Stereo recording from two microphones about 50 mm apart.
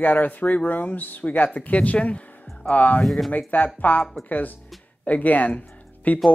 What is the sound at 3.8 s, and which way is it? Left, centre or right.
Speech, left.